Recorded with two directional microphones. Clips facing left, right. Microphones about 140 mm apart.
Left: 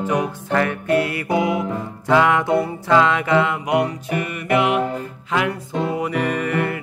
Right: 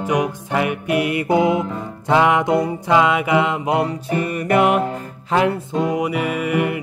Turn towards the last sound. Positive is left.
turn(degrees=-10)  # may be behind; listen again after turning